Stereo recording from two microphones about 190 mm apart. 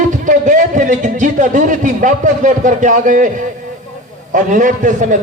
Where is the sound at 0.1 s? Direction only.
40° right (ahead or behind).